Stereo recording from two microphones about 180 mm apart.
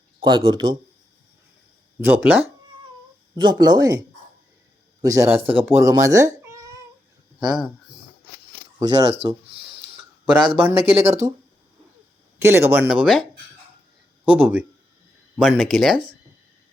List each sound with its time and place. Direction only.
0.2 s speech: 30° right (ahead or behind)
2.0 s speech: 10° right (ahead or behind)
3.3 s speech: 25° right (ahead or behind)
5.0 s speech: 15° right (ahead or behind)
7.3 s speech: 5° right (ahead or behind)
8.8 s speech: 20° right (ahead or behind)
9.1 s a sound: 35° right (ahead or behind)
10.6 s speech: 15° right (ahead or behind)
12.4 s speech: 15° right (ahead or behind)
14.3 s speech: 10° right (ahead or behind)